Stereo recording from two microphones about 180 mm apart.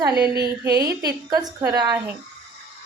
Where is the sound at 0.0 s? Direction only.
20° right (ahead or behind).